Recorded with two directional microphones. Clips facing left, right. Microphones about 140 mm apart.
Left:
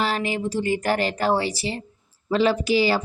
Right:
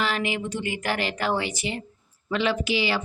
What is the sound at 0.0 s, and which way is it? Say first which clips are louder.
Speech: left 3 dB; 40° left (ahead or behind).